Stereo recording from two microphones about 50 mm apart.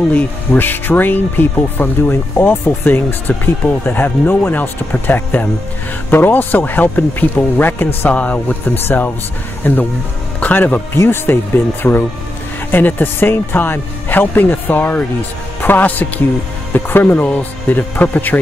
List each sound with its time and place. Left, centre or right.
0.5 s speech: left
8.1 s speech: left
8.5 s speech: left
11.0 s speech: left